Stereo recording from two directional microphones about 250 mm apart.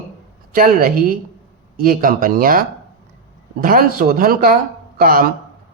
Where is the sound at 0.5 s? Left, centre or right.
Right.